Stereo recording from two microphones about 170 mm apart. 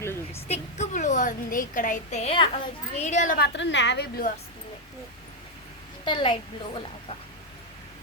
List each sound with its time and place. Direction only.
0.0 s a sound: 15° left (ahead or behind)
0.4 s a woman's voice: 40° left (ahead or behind)
3.3 s a woman's voice: 85° left
6.1 s a woman's voice: 30° left (ahead or behind)